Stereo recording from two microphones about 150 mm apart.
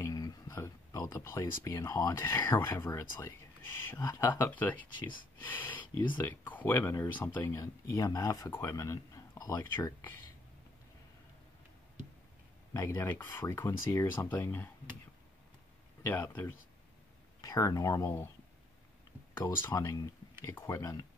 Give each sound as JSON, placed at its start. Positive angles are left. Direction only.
{"t": 0.0, "sound": "a sound", "side_deg": 25}
{"t": 0.5, "sound": "speech", "side_deg": 15}
{"t": 12.7, "sound": "speech", "side_deg": 20}
{"t": 16.0, "sound": "speech", "side_deg": 15}
{"t": 19.3, "sound": "speech", "side_deg": 20}